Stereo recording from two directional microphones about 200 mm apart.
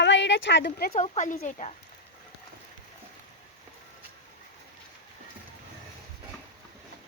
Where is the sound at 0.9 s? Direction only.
35° left (ahead or behind).